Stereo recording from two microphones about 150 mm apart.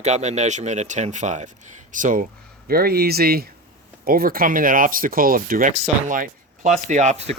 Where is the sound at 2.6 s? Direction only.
90° right.